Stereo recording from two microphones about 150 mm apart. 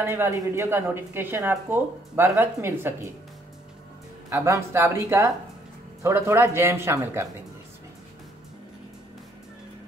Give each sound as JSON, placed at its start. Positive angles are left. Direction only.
{"t": 0.0, "sound": "speech", "side_deg": -15}
{"t": 4.3, "sound": "speech", "side_deg": -20}